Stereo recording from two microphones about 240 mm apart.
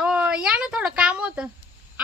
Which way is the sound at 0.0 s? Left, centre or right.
Centre.